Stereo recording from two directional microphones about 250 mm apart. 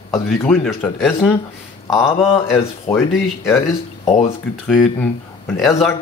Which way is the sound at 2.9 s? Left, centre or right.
Centre.